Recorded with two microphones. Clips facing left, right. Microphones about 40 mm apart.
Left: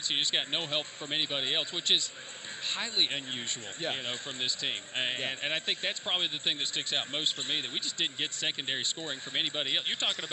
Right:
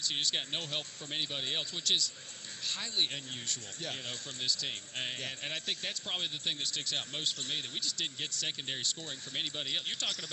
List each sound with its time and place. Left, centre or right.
0.0 s speech: left